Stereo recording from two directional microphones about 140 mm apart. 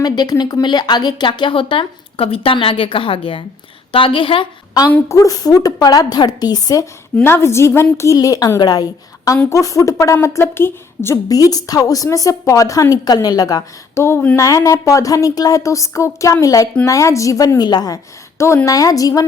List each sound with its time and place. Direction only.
0.0 s speech: 30° left (ahead or behind)
4.9 s a woman's voice: 15° left (ahead or behind)
7.3 s a woman's voice: 15° left (ahead or behind)